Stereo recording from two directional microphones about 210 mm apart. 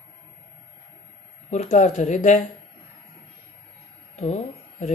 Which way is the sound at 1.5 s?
35° left (ahead or behind).